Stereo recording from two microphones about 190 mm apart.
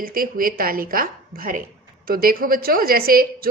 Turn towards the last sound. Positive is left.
turn(degrees=-50)  # may be behind; listen again after turning